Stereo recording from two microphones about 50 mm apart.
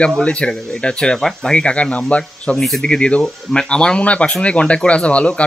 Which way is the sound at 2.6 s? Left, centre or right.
Centre.